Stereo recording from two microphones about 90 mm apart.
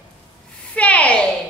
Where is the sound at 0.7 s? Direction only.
15° left (ahead or behind).